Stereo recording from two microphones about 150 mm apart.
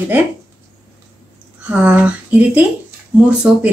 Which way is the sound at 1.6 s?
10° right (ahead or behind).